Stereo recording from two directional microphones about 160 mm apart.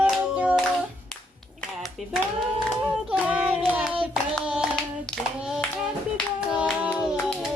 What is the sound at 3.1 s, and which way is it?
A capella, 5° right (ahead or behind).